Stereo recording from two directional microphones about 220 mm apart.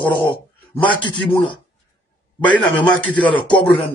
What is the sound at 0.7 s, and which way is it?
Speech, 15° left (ahead or behind).